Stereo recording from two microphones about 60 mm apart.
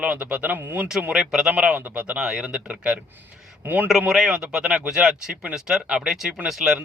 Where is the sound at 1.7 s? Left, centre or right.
Right.